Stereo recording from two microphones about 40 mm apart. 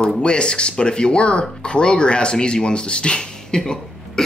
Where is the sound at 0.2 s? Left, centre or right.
Left.